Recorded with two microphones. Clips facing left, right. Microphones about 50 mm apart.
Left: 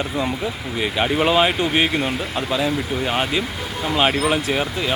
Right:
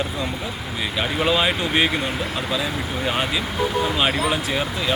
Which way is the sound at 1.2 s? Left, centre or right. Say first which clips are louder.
Left 2 dB; left.